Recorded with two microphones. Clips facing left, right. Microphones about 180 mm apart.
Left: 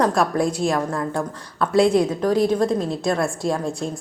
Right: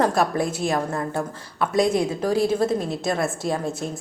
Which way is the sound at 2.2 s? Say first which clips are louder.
Even; 30° right (ahead or behind).